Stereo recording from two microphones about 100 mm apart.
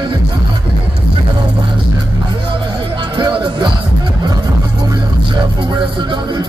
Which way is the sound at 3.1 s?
50° right (ahead or behind).